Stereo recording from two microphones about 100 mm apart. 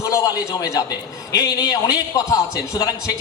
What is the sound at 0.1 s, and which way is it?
A man's voice, 35° left (ahead or behind).